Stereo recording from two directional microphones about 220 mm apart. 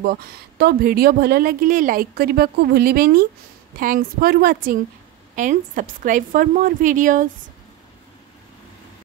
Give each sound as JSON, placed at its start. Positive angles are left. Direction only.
{"t": 0.0, "sound": "a woman's voice", "side_deg": -45}